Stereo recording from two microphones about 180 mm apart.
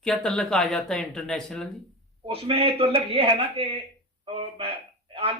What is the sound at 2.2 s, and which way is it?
Speech, 30° right (ahead or behind).